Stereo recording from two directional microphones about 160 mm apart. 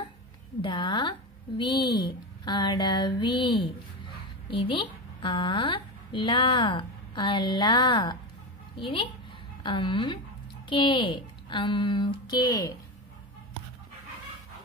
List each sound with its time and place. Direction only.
0.6 s a woman's voice: 30° left (ahead or behind)